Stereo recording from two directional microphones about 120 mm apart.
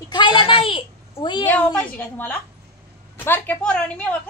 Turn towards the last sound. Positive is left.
turn(degrees=10)  # may be behind; listen again after turning